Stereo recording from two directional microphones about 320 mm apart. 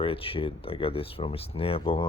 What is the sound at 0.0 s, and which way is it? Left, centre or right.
Speech, centre.